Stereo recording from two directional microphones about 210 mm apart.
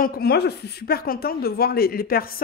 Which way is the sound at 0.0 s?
50° left (ahead or behind).